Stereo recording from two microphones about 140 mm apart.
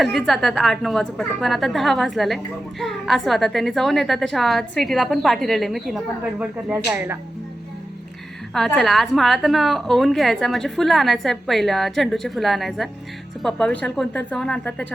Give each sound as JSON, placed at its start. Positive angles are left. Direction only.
{"t": 0.0, "sound": "a woman's voice", "side_deg": 0}
{"t": 8.5, "sound": "a woman's voice", "side_deg": 0}